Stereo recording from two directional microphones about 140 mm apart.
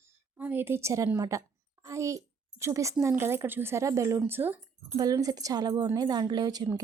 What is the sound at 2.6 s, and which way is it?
Speech, 20° right (ahead or behind).